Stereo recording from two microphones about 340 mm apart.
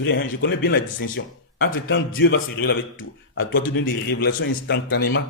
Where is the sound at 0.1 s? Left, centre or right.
Left.